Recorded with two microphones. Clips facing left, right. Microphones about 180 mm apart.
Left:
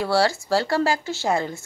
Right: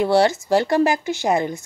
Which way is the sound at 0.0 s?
20° right (ahead or behind).